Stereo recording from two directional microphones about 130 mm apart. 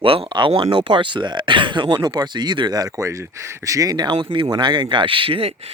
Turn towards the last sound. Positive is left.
turn(degrees=-40)  # may be behind; listen again after turning